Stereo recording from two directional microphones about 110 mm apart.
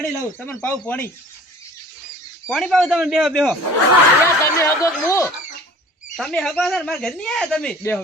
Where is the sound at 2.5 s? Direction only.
Centre (ahead or behind).